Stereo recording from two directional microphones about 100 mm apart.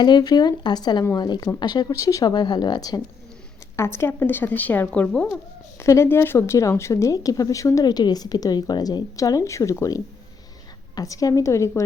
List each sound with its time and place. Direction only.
0.0 s speech: 45° left (ahead or behind)
3.8 s a woman's voice: 25° left (ahead or behind); by 5.3 s 10° left (ahead or behind)
5.8 s speech: 30° left (ahead or behind)